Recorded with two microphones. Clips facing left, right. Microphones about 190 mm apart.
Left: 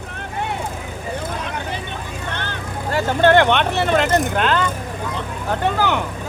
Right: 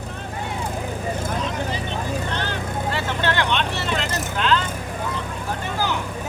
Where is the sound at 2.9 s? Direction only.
45° left (ahead or behind).